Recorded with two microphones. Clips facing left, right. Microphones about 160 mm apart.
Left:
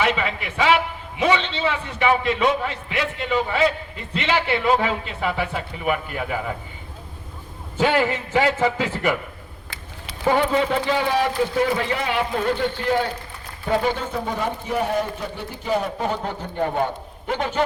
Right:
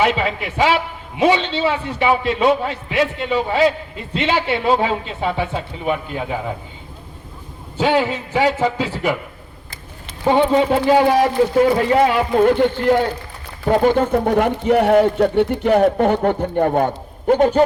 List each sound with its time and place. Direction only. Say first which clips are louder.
0.0 s a man's voice: right 4 dB; 35° right (ahead or behind)
7.8 s a man's voice: right 2 dB; 15° right (ahead or behind)
10.5 s speech: right 7 dB; 40° right (ahead or behind)